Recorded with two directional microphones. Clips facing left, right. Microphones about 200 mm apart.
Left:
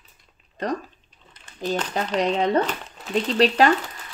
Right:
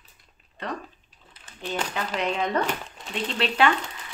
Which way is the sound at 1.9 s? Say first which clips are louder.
Left 5 dB; 35° left (ahead or behind).